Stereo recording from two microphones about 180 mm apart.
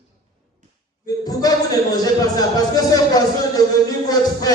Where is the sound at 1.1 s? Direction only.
20° left (ahead or behind).